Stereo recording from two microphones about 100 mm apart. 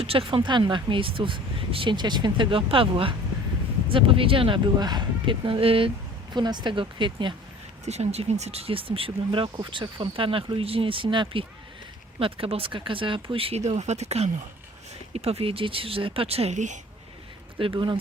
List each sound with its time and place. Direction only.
0.0 s speech: 65° right (ahead or behind)
4.8 s speech: 45° right (ahead or behind); by 5.9 s 65° right (ahead or behind)
6.3 s speech: 45° right (ahead or behind)
7.9 s speech: 90° right
17.6 s speech: 60° right (ahead or behind)